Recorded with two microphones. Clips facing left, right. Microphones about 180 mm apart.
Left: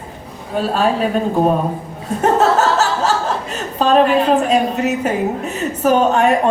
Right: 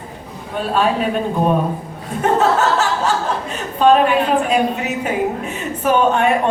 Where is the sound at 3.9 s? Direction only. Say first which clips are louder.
Left 3 dB; 35° left (ahead or behind).